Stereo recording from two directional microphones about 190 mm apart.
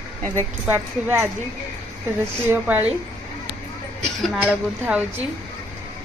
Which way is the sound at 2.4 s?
10° right (ahead or behind).